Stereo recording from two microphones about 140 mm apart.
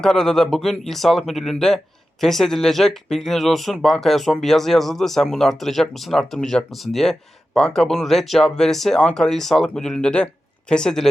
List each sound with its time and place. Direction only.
0.0 s speech: 5° left (ahead or behind)